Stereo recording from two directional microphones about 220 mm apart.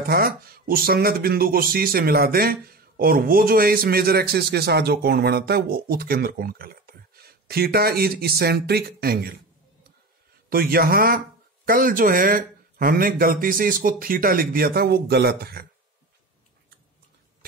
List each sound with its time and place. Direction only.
0.0 s speech: 45° right (ahead or behind)
10.5 s speech: 40° right (ahead or behind)